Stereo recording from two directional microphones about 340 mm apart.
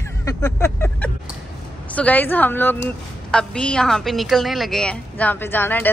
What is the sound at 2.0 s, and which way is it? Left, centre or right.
A woman's voice, centre.